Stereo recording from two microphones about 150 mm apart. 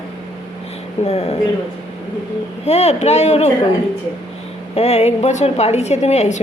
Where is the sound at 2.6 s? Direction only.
45° left (ahead or behind).